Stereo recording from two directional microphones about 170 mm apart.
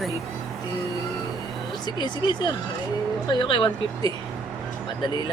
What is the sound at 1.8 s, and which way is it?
Speech, 25° left (ahead or behind).